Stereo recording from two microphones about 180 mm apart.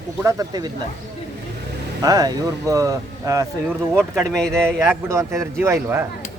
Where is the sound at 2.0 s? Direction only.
20° right (ahead or behind).